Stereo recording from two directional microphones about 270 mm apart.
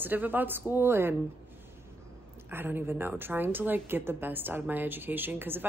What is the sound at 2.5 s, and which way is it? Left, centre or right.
Speech, centre.